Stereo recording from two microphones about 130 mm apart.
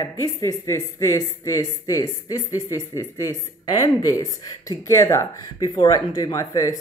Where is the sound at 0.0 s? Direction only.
25° left (ahead or behind).